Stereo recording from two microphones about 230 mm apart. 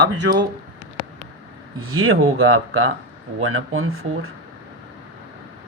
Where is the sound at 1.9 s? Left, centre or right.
Right.